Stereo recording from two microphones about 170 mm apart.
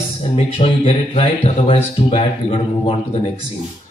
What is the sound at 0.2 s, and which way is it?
Speech, 35° left (ahead or behind).